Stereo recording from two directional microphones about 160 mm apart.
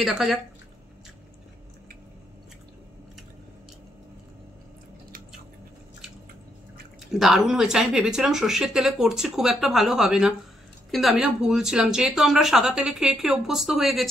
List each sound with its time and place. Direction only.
0.0 s speech: centre (ahead or behind)
7.1 s speech: centre (ahead or behind)